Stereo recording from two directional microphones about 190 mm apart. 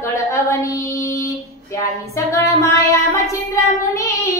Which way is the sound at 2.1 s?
15° left (ahead or behind).